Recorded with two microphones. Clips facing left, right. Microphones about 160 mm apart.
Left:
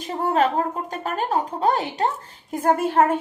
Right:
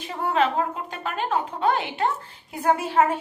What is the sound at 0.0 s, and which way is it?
A woman's voice, 40° left (ahead or behind).